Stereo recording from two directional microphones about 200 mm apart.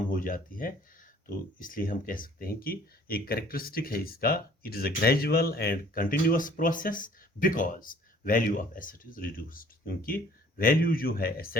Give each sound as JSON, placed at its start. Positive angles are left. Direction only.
{"t": 0.1, "sound": "speech", "side_deg": 45}